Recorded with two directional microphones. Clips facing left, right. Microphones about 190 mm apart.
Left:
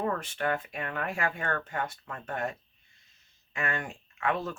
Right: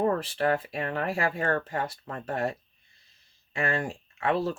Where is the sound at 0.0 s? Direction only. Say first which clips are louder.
Right 5 dB; 35° right (ahead or behind).